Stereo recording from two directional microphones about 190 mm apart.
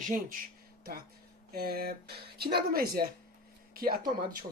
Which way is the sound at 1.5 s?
55° right (ahead or behind).